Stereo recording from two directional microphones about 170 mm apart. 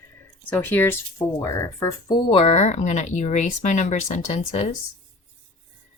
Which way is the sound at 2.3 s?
35° left (ahead or behind).